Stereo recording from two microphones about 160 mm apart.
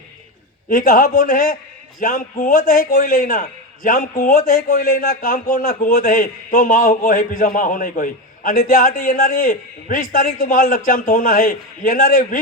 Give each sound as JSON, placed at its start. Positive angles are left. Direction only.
{"t": 0.7, "sound": "a man's voice", "side_deg": 60}